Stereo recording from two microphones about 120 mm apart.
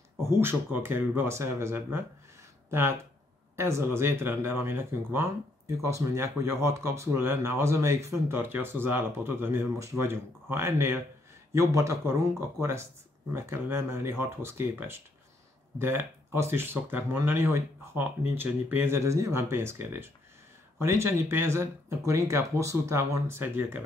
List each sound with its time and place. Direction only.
0.2 s speech: 20° right (ahead or behind)
13.3 s speech: 20° right (ahead or behind)